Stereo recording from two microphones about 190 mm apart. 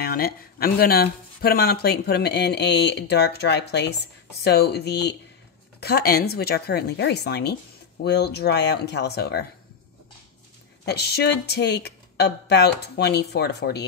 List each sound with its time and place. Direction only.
0.0 s speech: 50° left (ahead or behind)
10.9 s speech: 60° left (ahead or behind)